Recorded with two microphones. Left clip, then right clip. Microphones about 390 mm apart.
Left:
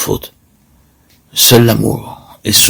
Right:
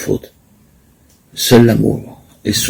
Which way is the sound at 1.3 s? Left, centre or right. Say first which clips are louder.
Left 2 dB; left.